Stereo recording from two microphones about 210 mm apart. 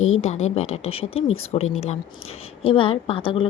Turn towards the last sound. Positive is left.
turn(degrees=25)  # may be behind; listen again after turning